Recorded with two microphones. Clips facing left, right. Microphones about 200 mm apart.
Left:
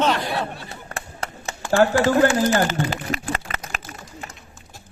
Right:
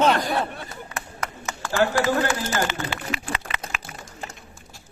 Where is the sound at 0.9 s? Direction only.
30° left (ahead or behind).